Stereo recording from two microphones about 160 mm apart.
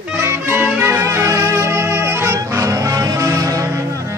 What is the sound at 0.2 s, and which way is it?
Music, 15° right (ahead or behind).